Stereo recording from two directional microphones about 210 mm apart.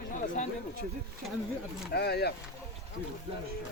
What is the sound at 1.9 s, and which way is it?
Speech, 50° left (ahead or behind).